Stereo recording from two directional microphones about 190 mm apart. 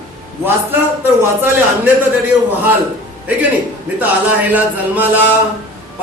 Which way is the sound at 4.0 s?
10° right (ahead or behind).